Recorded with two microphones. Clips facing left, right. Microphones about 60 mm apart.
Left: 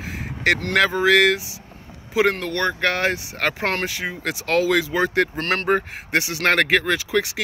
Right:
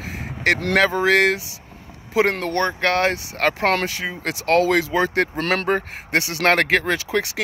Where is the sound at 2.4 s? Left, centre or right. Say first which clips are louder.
Right 1 dB; right.